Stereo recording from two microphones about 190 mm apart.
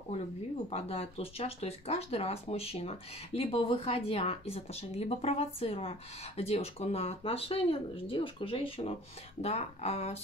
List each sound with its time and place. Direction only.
0.7 s speech: 30° left (ahead or behind)